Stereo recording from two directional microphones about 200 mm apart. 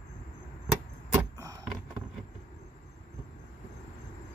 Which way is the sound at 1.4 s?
15° right (ahead or behind).